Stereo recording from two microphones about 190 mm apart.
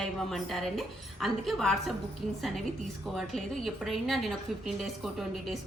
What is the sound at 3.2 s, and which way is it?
A woman's voice, centre (ahead or behind).